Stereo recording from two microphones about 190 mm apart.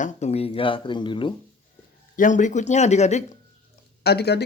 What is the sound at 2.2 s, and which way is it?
Speech, 40° left (ahead or behind).